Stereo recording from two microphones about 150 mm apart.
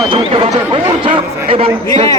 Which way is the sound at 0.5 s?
25° right (ahead or behind).